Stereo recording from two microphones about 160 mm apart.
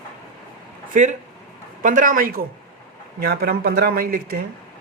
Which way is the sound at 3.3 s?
75° right (ahead or behind).